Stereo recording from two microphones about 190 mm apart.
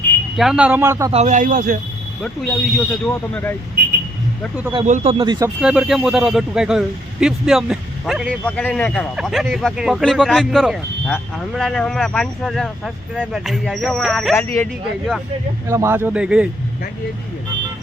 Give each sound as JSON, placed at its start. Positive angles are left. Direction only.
{"t": 0.3, "sound": "a man's voice", "side_deg": -5}
{"t": 1.1, "sound": "a man's voice", "side_deg": -40}
{"t": 2.7, "sound": "speech", "side_deg": 10}
{"t": 4.9, "sound": "speech", "side_deg": -40}
{"t": 5.1, "sound": "speech", "side_deg": -25}
{"t": 5.5, "sound": "speech", "side_deg": -5}
{"t": 14.3, "sound": "speech", "side_deg": 10}
{"t": 15.6, "sound": "a man's voice", "side_deg": -15}